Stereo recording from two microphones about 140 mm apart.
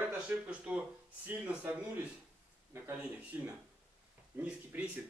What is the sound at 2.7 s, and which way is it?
Speech, 15° right (ahead or behind).